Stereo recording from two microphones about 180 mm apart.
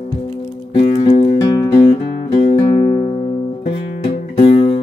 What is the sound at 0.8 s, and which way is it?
Music, 35° left (ahead or behind).